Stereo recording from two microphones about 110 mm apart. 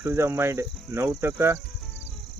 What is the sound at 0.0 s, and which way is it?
Cricket, 20° right (ahead or behind).